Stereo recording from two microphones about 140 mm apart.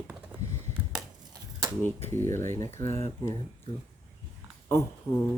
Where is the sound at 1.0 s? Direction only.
30° right (ahead or behind).